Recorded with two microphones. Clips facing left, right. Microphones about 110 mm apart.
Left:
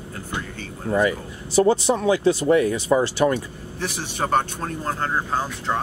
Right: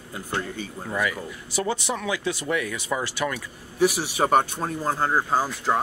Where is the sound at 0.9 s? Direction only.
30° left (ahead or behind).